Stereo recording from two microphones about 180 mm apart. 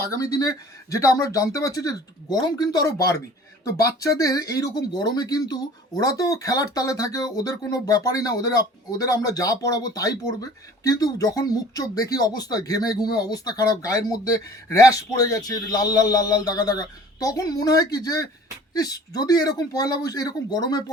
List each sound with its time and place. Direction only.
0.1 s speech: 20° left (ahead or behind)